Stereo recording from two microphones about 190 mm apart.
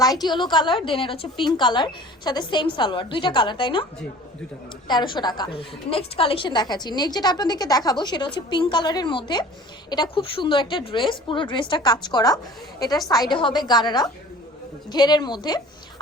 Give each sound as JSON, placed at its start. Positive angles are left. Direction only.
{"t": 0.0, "sound": "a woman's voice", "side_deg": 20}
{"t": 4.9, "sound": "a woman's voice", "side_deg": 25}